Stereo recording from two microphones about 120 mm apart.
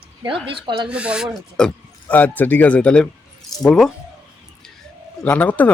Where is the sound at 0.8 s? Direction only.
10° right (ahead or behind).